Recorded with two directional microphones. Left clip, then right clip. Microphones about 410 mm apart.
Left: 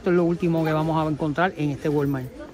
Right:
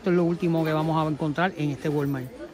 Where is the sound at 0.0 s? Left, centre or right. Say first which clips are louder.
Left 2 dB; centre.